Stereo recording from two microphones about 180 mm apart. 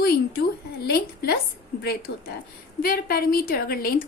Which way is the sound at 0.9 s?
60° left (ahead or behind).